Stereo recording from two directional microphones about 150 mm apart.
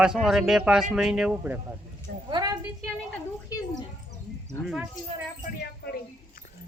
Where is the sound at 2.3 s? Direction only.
30° right (ahead or behind).